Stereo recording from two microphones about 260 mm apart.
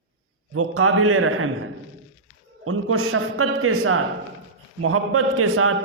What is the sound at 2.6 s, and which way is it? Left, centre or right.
A man's voice, right.